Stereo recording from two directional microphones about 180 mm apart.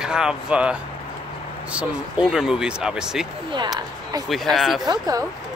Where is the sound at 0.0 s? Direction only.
5° right (ahead or behind).